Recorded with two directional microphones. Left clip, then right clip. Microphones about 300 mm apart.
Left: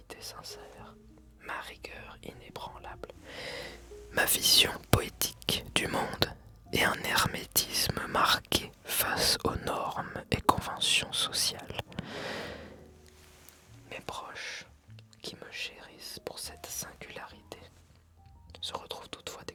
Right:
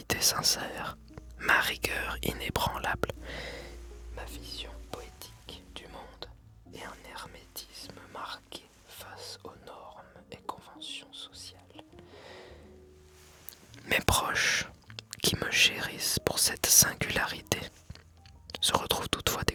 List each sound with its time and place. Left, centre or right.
0.1 s speech: right
4.1 s speech: left
13.9 s speech: right